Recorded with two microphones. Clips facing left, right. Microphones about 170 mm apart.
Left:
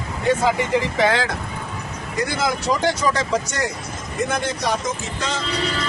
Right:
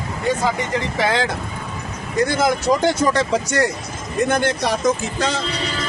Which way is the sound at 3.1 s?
60° right (ahead or behind).